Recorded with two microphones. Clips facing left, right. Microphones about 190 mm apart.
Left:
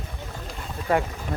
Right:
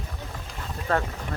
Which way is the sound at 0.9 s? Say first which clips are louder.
Left 3 dB; 15° left (ahead or behind).